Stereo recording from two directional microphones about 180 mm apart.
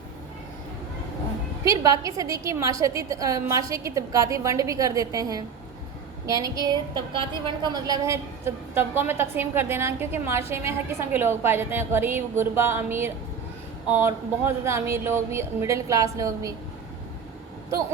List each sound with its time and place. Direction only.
1.6 s a woman's voice: 15° right (ahead or behind)